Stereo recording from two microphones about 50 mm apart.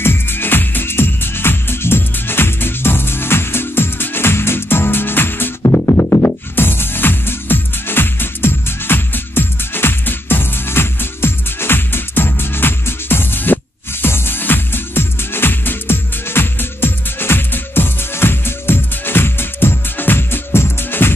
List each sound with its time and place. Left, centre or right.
0.0 s music: left
5.7 s music: left
6.2 s music: left